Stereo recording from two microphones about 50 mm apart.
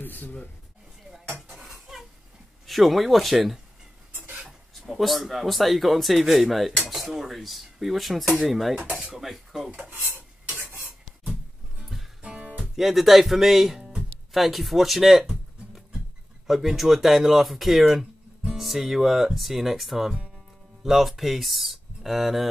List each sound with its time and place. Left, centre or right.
0.0 s speech: left
2.6 s speech: centre
4.1 s a sound: right
4.5 s speech: centre
10.1 s stir: right
11.8 s music: centre
12.2 s music: right
12.7 s speech: centre